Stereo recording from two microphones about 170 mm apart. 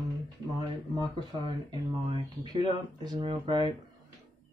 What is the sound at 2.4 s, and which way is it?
Speech, 25° right (ahead or behind).